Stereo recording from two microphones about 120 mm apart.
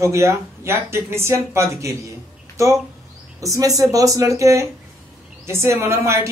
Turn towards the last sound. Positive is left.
turn(degrees=-25)  # may be behind; listen again after turning